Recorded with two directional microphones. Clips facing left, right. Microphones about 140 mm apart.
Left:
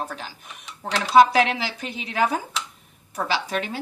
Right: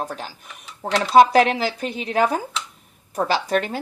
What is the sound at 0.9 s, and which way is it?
Speech, 50° right (ahead or behind).